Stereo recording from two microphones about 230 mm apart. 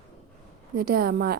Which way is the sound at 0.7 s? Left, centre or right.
Right.